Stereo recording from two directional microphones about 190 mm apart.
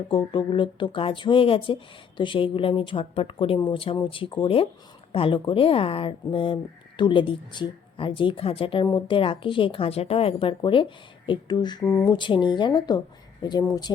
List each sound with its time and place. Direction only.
0.1 s speech: 25° left (ahead or behind)